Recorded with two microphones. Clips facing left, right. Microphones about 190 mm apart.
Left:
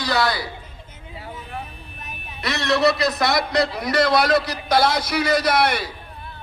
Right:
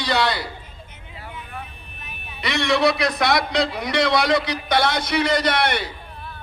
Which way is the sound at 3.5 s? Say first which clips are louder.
Left 1 dB; 10° left (ahead or behind).